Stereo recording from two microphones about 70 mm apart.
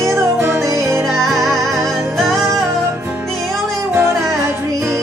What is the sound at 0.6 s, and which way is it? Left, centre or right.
Music, right.